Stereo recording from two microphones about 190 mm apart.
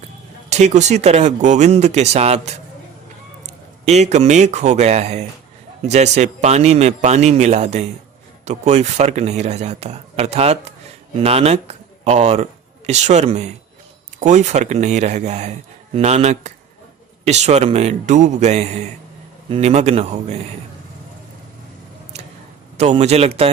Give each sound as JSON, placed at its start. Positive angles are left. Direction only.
{"t": 0.5, "sound": "speech", "side_deg": -35}
{"t": 3.8, "sound": "speech", "side_deg": -35}
{"t": 22.8, "sound": "speech", "side_deg": -35}